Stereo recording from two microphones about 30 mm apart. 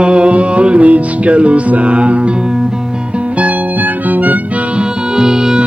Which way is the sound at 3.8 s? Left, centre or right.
Right.